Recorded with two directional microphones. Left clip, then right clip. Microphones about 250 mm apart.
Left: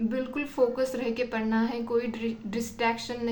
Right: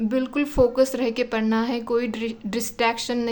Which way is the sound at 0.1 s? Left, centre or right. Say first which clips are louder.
Right 7 dB; right.